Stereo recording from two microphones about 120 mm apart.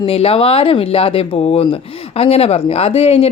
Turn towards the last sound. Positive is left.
turn(degrees=55)  # may be behind; listen again after turning